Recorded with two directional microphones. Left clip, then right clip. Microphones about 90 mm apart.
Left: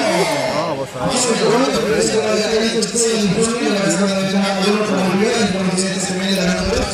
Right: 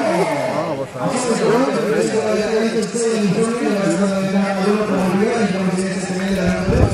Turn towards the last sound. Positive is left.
turn(degrees=15)  # may be behind; listen again after turning